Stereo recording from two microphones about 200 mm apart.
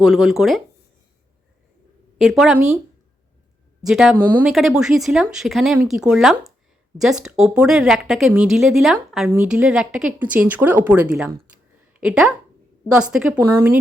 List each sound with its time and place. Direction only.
0.0 s speech: centre (ahead or behind)
2.2 s speech: centre (ahead or behind)
3.8 s speech: centre (ahead or behind)
13.5 s speech: 15° right (ahead or behind)